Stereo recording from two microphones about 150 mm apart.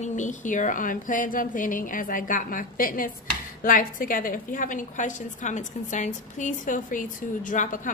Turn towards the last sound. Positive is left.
turn(degrees=60)  # may be behind; listen again after turning